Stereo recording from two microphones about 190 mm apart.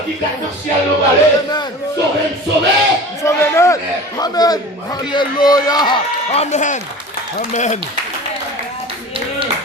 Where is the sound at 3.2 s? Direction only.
15° left (ahead or behind); by 7.8 s 40° left (ahead or behind).